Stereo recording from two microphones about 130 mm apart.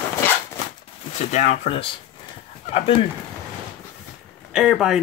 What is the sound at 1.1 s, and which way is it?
Speech, 65° left (ahead or behind).